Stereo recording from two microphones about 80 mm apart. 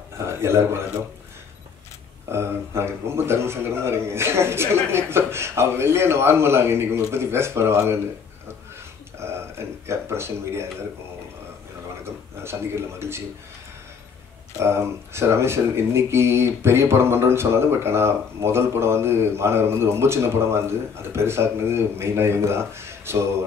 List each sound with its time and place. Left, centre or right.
0.3 s a man's voice: right
2.3 s speech: right
9.2 s a sound: right
12.0 s speech: right
14.6 s speech: right